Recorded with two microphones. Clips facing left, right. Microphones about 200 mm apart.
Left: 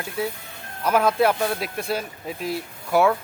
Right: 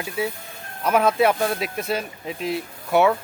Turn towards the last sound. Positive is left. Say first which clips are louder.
# right 1 dB
turn(degrees=0)  # may be behind; listen again after turning